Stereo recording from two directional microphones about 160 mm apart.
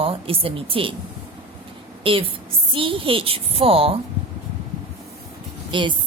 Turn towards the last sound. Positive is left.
turn(degrees=-30)  # may be behind; listen again after turning